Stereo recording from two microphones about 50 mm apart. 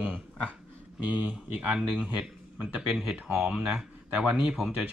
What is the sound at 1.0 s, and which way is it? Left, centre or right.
Speech, right.